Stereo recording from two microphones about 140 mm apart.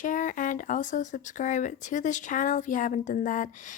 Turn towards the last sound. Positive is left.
turn(degrees=65)  # may be behind; listen again after turning